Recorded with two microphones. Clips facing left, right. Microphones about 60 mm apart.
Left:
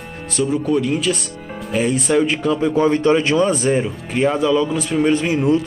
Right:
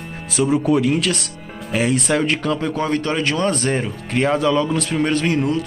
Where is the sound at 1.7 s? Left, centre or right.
Centre.